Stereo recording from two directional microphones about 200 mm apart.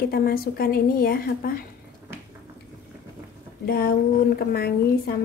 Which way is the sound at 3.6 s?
50° left (ahead or behind).